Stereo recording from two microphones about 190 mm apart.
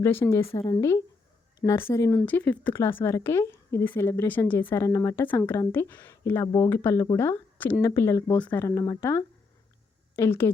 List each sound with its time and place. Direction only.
0.0 s speech: 10° left (ahead or behind)